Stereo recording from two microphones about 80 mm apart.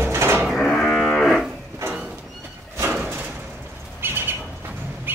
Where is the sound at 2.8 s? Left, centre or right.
Right.